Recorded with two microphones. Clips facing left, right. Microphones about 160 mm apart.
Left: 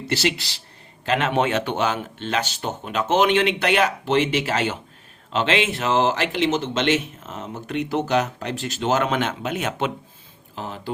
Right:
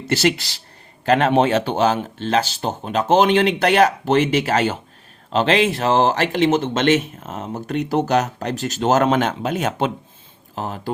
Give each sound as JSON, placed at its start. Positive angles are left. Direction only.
{"t": 0.1, "sound": "speech", "side_deg": -45}